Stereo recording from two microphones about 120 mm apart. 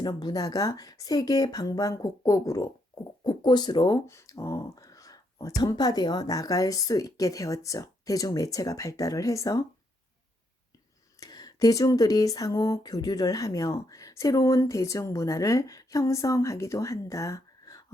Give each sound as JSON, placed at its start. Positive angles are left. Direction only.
{"t": 0.0, "sound": "speech", "side_deg": 35}
{"t": 11.2, "sound": "speech", "side_deg": 35}